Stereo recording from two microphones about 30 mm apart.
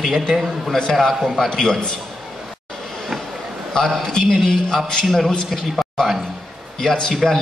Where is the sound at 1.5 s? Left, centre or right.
Left.